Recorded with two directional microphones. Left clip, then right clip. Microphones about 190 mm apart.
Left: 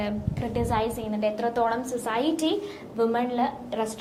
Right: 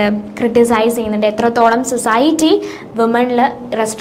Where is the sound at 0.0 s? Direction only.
45° right (ahead or behind).